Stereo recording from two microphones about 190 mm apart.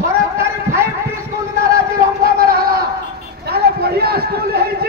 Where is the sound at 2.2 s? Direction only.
55° right (ahead or behind).